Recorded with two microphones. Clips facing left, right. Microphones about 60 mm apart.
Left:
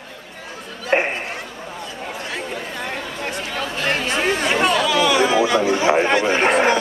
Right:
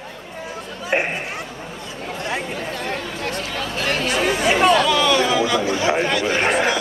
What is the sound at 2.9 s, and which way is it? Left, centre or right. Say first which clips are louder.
Chatter: right 1 dB; centre.